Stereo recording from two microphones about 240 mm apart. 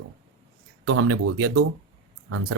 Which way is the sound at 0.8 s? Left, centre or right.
Right.